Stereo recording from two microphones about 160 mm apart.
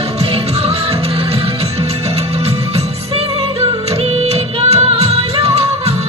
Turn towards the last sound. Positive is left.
turn(degrees=-40)  # may be behind; listen again after turning